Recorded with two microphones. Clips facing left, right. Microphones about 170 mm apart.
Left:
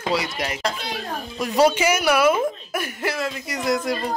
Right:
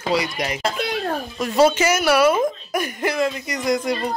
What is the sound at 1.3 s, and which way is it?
A man's voice, 10° left (ahead or behind).